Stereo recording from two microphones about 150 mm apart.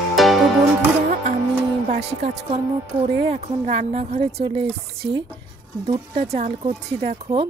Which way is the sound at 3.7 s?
40° right (ahead or behind).